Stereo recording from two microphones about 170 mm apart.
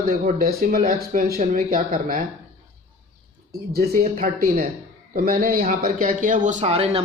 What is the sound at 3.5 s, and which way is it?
Speech, 65° right (ahead or behind).